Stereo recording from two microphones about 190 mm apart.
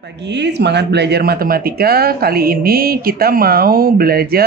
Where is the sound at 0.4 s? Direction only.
60° right (ahead or behind).